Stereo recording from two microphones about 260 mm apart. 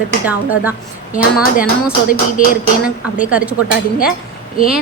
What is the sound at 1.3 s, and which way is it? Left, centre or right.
Speech, centre.